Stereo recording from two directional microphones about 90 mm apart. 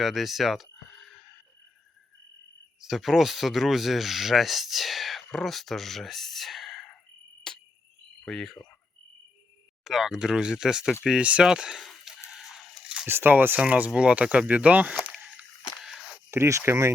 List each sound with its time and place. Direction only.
0.0 s a sound: centre (ahead or behind)
2.9 s speech: centre (ahead or behind)
7.5 s cricket: 10° left (ahead or behind)
8.2 s speech: 5° left (ahead or behind)
9.8 s speech: 5° right (ahead or behind)
11.9 s a sound: 5° right (ahead or behind)
13.1 s speech: 25° right (ahead or behind)
15.8 s a sound: 5° right (ahead or behind)
16.3 s speech: 30° right (ahead or behind)